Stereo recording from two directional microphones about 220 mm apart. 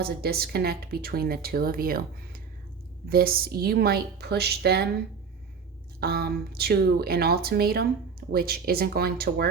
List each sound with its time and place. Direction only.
0.0 s speech: 45° right (ahead or behind)
6.0 s speech: 45° right (ahead or behind)